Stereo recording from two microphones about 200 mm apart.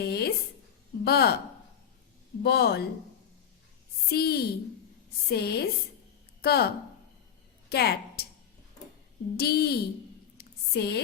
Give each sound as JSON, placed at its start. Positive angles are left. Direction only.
{"t": 0.0, "sound": "a sound", "side_deg": 50}
{"t": 1.0, "sound": "a woman's voice", "side_deg": 50}
{"t": 2.4, "sound": "a woman's voice", "side_deg": 50}
{"t": 4.1, "sound": "a woman's voice", "side_deg": 50}
{"t": 7.7, "sound": "a woman's voice", "side_deg": 55}
{"t": 9.4, "sound": "a woman's voice", "side_deg": 50}
{"t": 10.3, "sound": "a sound", "side_deg": 55}